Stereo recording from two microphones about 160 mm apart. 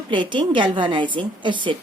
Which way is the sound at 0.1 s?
30° right (ahead or behind).